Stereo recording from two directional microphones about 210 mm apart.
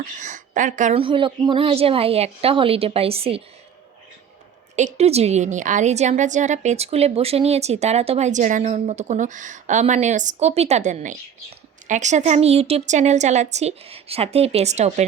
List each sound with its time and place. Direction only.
0.0 s a woman's voice: 35° right (ahead or behind)
4.8 s a woman's voice: 30° right (ahead or behind)